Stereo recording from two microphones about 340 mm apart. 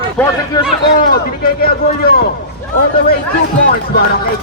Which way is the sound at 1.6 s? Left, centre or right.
Left.